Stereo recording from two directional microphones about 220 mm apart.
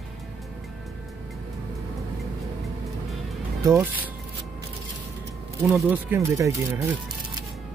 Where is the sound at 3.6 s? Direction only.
10° right (ahead or behind).